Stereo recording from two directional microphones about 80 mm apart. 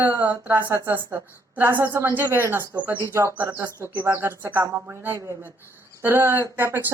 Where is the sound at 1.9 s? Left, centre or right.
Right.